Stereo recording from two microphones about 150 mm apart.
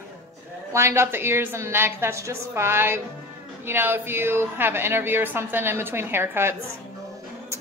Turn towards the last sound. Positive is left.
turn(degrees=-15)  # may be behind; listen again after turning